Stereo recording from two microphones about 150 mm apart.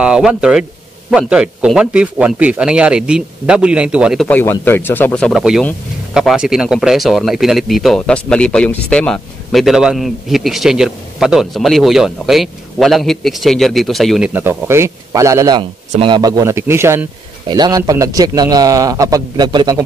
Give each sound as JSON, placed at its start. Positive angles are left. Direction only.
{"t": 0.0, "sound": "a man's voice", "side_deg": -5}
{"t": 4.3, "sound": "speech", "side_deg": 15}
{"t": 5.4, "sound": "speech", "side_deg": -5}
{"t": 14.3, "sound": "a man's voice", "side_deg": -15}